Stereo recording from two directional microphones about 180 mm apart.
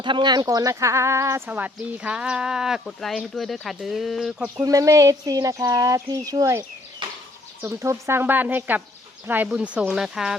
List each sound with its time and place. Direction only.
0.0 s speech: 25° right (ahead or behind); by 4.6 s 5° right (ahead or behind)
4.6 s speech: 20° right (ahead or behind); by 10.3 s 5° right (ahead or behind)